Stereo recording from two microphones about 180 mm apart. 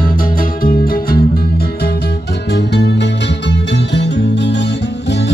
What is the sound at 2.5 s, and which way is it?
Music, 70° left (ahead or behind).